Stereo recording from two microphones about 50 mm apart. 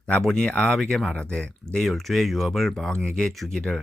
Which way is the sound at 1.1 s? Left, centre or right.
Left.